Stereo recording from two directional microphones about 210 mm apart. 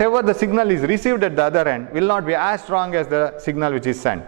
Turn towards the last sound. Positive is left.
turn(degrees=-15)  # may be behind; listen again after turning